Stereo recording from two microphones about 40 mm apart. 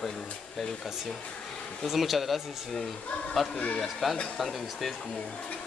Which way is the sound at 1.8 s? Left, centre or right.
Centre.